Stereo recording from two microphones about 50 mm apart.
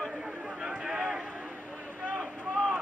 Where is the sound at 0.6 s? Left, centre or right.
Centre.